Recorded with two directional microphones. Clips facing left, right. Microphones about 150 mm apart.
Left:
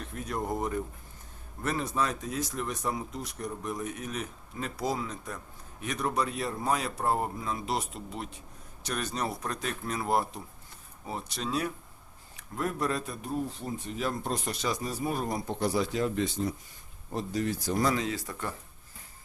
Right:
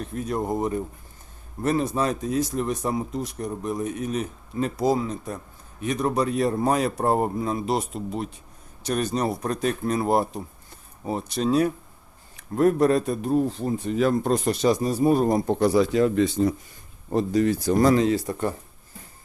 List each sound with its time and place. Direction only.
0.1 s speech: 25° right (ahead or behind)
6.3 s speech: 45° right (ahead or behind)
12.5 s a man's voice: 50° right (ahead or behind); by 14.3 s 90° right
14.3 s a man's voice: 40° right (ahead or behind)
15.5 s speech: 80° right
17.1 s speech: 70° right (ahead or behind)
17.8 s speech: 40° right (ahead or behind)